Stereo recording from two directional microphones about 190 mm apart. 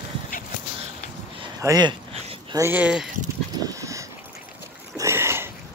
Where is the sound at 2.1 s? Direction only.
30° right (ahead or behind).